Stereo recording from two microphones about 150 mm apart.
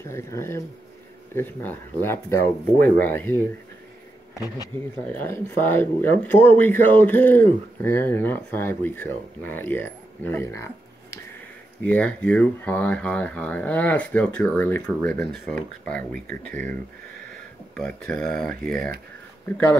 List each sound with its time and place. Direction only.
0.0 s speech: 20° left (ahead or behind)
5.0 s speech: 15° left (ahead or behind)
17.7 s speech: 5° left (ahead or behind)